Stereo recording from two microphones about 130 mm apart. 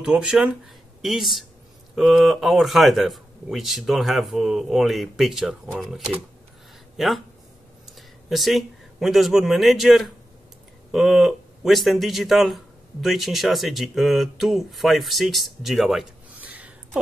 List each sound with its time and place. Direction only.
0.0 s a man's voice: 5° right (ahead or behind)
8.3 s a man's voice: centre (ahead or behind)
16.3 s a sound: 10° right (ahead or behind)